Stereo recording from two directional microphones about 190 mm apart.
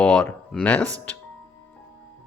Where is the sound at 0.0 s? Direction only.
5° left (ahead or behind).